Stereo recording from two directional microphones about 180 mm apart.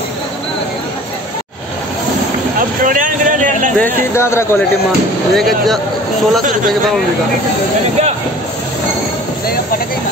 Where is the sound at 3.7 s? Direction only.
10° left (ahead or behind).